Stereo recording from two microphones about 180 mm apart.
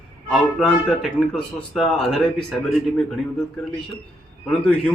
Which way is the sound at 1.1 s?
Centre (ahead or behind).